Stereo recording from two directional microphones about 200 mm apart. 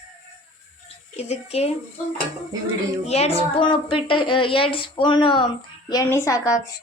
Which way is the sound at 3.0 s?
30° left (ahead or behind).